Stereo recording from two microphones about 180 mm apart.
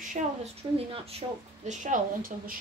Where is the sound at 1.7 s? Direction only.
45° right (ahead or behind).